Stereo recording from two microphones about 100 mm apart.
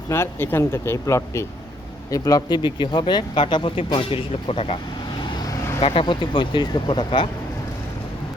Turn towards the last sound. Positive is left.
turn(degrees=55)  # may be behind; listen again after turning